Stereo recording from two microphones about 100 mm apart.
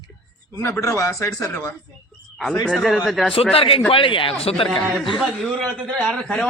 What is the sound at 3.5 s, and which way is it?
Speech, 75° left (ahead or behind).